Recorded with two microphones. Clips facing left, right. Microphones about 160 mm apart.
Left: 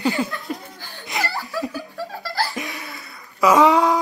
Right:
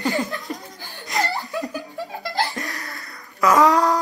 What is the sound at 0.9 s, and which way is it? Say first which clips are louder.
Music: right 1 dB; centre (ahead or behind).